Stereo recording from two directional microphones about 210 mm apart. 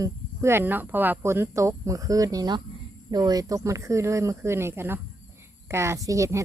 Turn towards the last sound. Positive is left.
turn(degrees=-15)  # may be behind; listen again after turning